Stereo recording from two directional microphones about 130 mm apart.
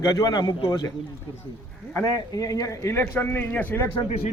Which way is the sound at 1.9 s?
25° left (ahead or behind).